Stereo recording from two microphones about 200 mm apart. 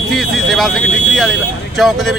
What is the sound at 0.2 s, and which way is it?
Speech, centre (ahead or behind).